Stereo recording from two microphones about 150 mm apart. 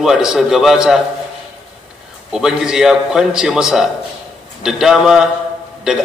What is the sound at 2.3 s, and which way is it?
A man's voice, 5° right (ahead or behind).